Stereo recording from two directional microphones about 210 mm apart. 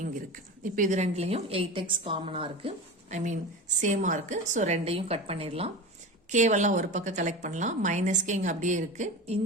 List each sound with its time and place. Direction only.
0.6 s a woman's voice: 35° right (ahead or behind)